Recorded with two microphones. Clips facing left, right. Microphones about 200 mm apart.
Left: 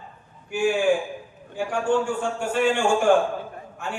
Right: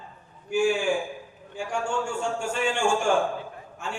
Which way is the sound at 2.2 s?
55° left (ahead or behind).